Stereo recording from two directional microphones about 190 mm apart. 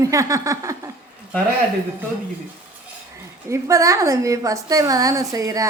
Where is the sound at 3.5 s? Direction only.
15° right (ahead or behind).